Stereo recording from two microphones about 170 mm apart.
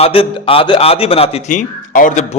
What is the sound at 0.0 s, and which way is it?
A man's voice, 30° left (ahead or behind).